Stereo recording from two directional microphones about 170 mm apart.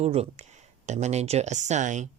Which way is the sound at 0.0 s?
40° right (ahead or behind).